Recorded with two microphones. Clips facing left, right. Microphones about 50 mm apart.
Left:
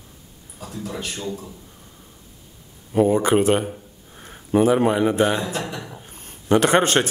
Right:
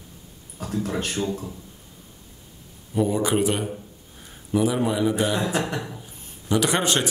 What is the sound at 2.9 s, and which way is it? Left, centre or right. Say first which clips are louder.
Speech: left 5 dB; left.